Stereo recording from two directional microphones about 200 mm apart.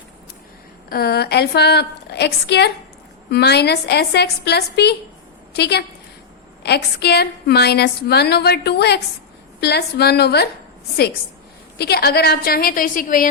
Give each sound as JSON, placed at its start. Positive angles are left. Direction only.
{"t": 0.9, "sound": "a woman's voice", "side_deg": 50}
{"t": 11.8, "sound": "a woman's voice", "side_deg": 50}